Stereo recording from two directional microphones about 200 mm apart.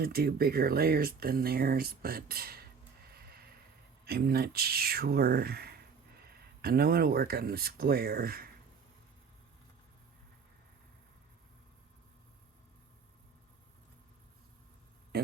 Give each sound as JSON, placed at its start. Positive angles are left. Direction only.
{"t": 0.0, "sound": "speech", "side_deg": -50}
{"t": 4.0, "sound": "speech", "side_deg": -50}
{"t": 15.1, "sound": "a sound", "side_deg": -55}